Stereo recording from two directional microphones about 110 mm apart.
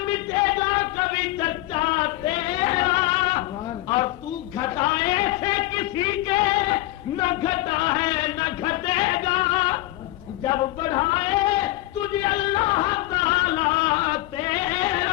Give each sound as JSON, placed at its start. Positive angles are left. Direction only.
{"t": 0.0, "sound": "chant", "side_deg": 45}
{"t": 4.6, "sound": "a sound", "side_deg": 40}
{"t": 10.4, "sound": "male singing", "side_deg": 40}